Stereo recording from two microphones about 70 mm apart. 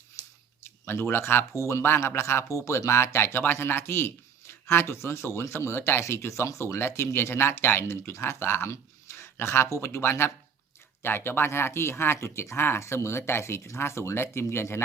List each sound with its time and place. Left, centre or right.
0.6 s speech: left
1.5 s speech: left
6.7 s speech: left